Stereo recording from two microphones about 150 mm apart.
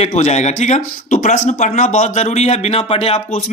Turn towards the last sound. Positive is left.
turn(degrees=40)  # may be behind; listen again after turning